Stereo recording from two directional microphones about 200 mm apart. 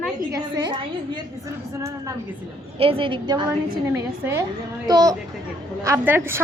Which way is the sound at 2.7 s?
30° right (ahead or behind).